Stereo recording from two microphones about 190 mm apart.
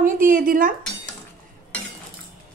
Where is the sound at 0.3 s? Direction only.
45° right (ahead or behind).